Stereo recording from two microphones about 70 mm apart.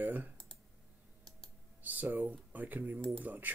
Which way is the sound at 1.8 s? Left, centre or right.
Right.